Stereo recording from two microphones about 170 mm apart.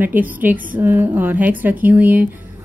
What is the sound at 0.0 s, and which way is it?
A woman's voice, 10° right (ahead or behind).